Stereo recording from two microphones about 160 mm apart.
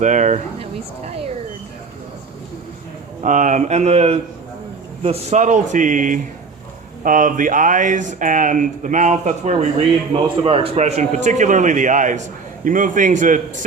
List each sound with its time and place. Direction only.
0.0 s speech: 50° right (ahead or behind)
0.6 s speech: 40° right (ahead or behind)
3.2 s a man's voice: 50° right (ahead or behind)